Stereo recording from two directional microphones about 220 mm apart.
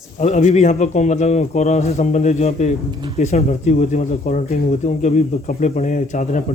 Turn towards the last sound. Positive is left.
turn(degrees=35)  # may be behind; listen again after turning